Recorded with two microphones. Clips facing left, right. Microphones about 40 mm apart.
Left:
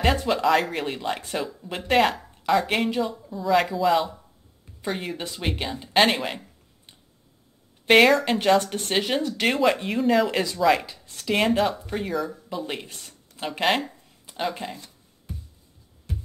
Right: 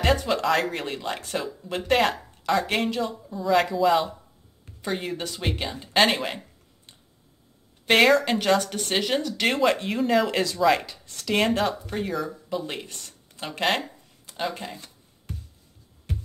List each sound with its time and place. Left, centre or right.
0.0 s speech: centre
12.8 s speech: centre
13.5 s speech: centre
16.1 s music: right